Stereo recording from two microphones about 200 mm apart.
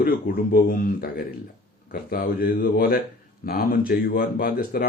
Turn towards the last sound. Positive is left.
turn(degrees=45)  # may be behind; listen again after turning